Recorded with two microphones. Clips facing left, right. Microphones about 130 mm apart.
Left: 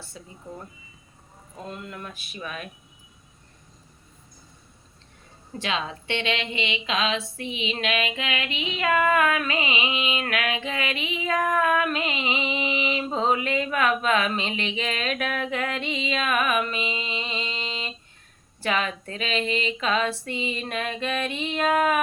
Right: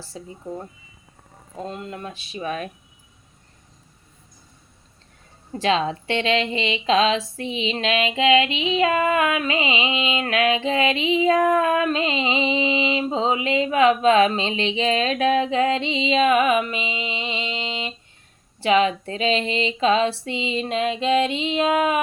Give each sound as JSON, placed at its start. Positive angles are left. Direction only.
{"t": 0.1, "sound": "speech", "side_deg": -30}
{"t": 1.6, "sound": "a woman's voice", "side_deg": -30}
{"t": 5.5, "sound": "a woman's voice", "side_deg": -35}